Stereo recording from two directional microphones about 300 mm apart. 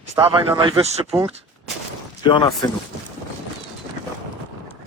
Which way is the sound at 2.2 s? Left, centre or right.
Centre.